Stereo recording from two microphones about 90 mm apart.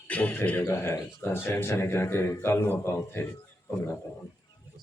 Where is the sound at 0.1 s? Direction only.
15° left (ahead or behind).